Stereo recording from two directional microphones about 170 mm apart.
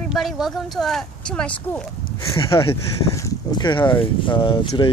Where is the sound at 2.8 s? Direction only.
20° left (ahead or behind).